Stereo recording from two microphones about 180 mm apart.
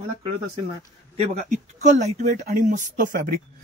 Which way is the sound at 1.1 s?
40° right (ahead or behind).